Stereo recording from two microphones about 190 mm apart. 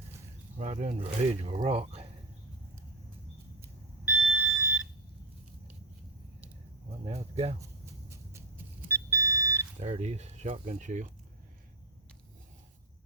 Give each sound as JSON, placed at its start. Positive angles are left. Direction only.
{"t": 0.6, "sound": "speech", "side_deg": -35}
{"t": 3.6, "sound": "alarm", "side_deg": -5}
{"t": 7.0, "sound": "a sound", "side_deg": -30}
{"t": 8.1, "sound": "vehicle", "side_deg": -15}
{"t": 9.8, "sound": "speech", "side_deg": -35}